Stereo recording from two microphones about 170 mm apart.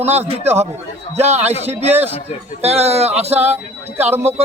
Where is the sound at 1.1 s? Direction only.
40° right (ahead or behind).